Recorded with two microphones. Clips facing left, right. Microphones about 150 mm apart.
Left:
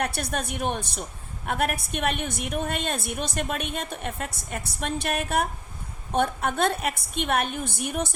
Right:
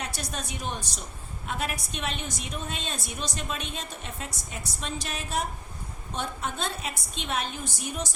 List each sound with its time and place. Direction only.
0.0 s a woman's voice: 60° left (ahead or behind)